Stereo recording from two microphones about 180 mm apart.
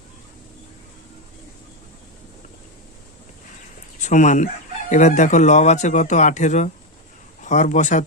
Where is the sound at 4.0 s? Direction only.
45° left (ahead or behind).